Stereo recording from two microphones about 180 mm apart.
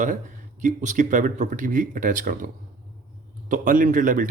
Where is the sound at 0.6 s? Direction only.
45° right (ahead or behind).